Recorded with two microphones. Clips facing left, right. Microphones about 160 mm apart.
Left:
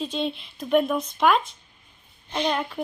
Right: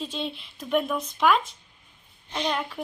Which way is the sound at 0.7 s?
45° left (ahead or behind).